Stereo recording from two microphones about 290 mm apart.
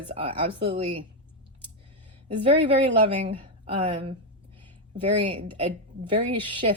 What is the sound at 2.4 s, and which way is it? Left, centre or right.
A woman's voice, centre.